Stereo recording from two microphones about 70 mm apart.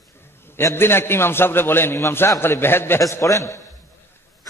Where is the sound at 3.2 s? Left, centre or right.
Left.